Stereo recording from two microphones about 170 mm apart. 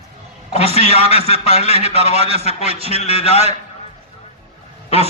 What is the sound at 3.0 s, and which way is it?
Speech, 35° left (ahead or behind).